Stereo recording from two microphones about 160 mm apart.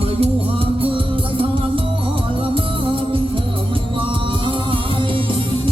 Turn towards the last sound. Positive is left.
turn(degrees=-35)  # may be behind; listen again after turning